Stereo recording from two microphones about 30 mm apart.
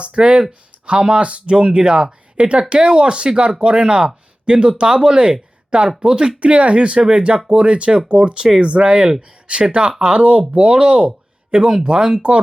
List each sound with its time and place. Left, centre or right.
0.0 s speech: right
1.5 s speech: right
2.3 s speech: right
2.6 s speech: right
6.4 s speech: right